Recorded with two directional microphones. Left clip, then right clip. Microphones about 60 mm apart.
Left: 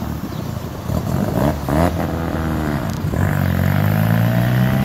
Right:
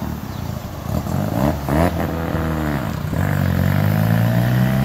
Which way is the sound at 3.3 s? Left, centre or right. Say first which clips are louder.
Even; right.